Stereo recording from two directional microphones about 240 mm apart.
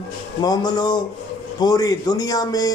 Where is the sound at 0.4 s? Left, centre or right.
Centre.